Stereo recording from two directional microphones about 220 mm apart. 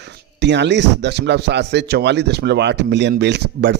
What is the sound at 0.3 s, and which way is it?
Speech, 50° right (ahead or behind).